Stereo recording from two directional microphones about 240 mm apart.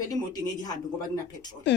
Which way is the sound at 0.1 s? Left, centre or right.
Centre.